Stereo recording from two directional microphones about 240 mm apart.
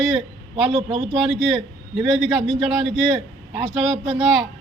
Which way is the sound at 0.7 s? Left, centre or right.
Right.